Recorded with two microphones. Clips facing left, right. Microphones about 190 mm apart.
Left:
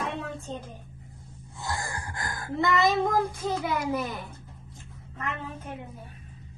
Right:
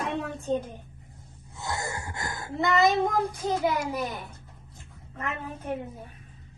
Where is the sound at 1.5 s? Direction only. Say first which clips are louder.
Right 1 dB; 20° right (ahead or behind).